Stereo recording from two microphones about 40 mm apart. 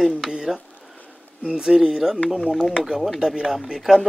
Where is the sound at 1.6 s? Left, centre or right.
Centre.